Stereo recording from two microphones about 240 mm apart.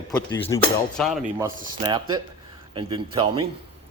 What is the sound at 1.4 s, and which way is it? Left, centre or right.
Speech, centre.